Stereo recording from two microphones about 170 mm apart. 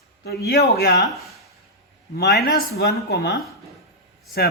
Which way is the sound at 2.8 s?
70° left (ahead or behind).